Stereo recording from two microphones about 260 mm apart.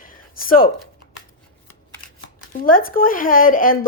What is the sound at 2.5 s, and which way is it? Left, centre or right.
Speech, left.